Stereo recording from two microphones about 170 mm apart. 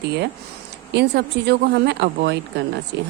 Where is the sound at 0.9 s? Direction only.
80° right.